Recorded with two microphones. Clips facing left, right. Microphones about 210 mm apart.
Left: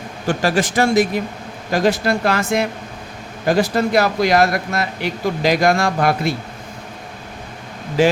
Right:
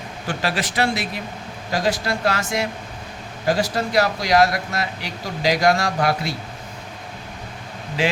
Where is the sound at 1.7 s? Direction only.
55° left (ahead or behind).